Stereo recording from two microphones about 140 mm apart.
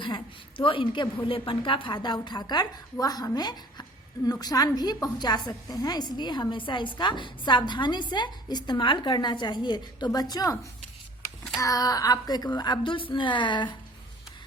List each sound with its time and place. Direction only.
0.0 s a woman's voice: 35° left (ahead or behind)